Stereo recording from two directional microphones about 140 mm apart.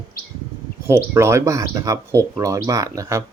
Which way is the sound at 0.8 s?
20° right (ahead or behind).